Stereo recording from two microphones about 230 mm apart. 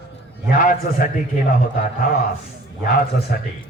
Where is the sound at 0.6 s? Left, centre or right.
Left.